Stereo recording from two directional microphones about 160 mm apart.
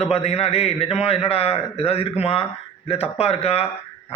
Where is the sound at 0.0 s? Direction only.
40° left (ahead or behind).